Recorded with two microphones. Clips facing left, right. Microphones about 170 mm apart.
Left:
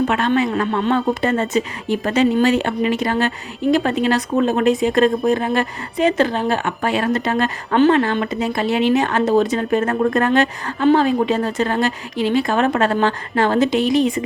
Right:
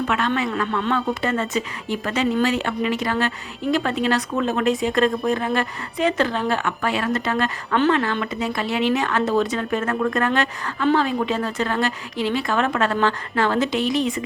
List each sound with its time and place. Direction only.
0.1 s a woman's voice: 25° left (ahead or behind)
2.1 s a woman's voice: 25° left (ahead or behind)
4.4 s a woman's voice: 30° left (ahead or behind)
6.3 s speech: 45° left (ahead or behind)
6.7 s a woman's voice: 25° left (ahead or behind)
7.7 s speech: 35° left (ahead or behind)
7.9 s a woman's voice: 25° left (ahead or behind)
10.8 s speech: 45° left (ahead or behind)
11.3 s speech: 30° left (ahead or behind)
11.8 s a woman's voice: 20° left (ahead or behind)
12.5 s speech: 30° left (ahead or behind)
13.0 s a woman's voice: 20° left (ahead or behind)